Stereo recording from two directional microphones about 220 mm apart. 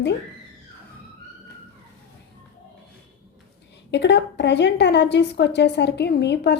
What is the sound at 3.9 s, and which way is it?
A woman's voice, 50° left (ahead or behind).